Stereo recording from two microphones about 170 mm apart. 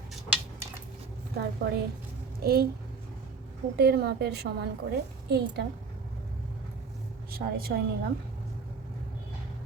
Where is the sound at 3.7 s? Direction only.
65° right (ahead or behind).